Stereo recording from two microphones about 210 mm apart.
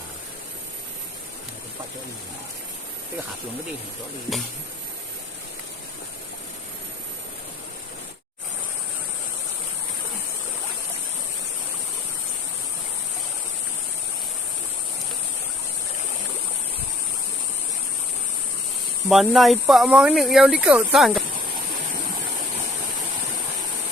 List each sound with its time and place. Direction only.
19.0 s speech: centre (ahead or behind)